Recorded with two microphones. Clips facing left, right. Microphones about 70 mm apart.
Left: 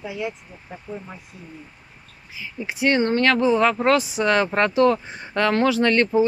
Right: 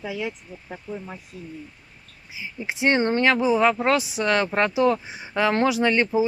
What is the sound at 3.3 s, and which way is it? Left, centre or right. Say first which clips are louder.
Speech: left 1 dB; centre.